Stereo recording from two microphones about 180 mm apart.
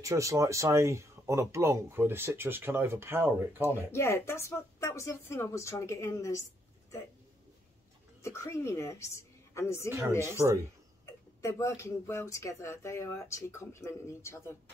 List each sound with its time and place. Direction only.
0.0 s speech: 15° right (ahead or behind)
3.6 s speech: 15° left (ahead or behind)
8.2 s a woman's voice: 15° left (ahead or behind)
11.1 s speech: 15° left (ahead or behind)